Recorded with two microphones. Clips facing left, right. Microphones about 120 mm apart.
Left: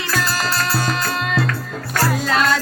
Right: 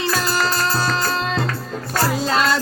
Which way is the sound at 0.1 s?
35° right (ahead or behind).